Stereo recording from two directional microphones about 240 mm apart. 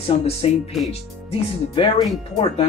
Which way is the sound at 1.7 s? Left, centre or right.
Left.